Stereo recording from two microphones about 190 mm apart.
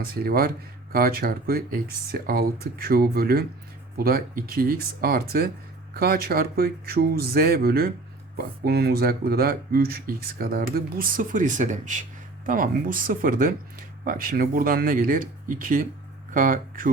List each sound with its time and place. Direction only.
0.0 s speech: 55° right (ahead or behind)